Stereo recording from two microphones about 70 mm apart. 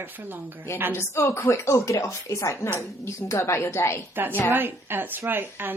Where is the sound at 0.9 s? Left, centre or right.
Left.